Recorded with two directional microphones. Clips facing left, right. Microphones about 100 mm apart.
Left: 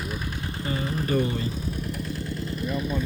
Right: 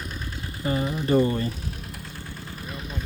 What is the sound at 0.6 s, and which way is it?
Engine, 30° right (ahead or behind).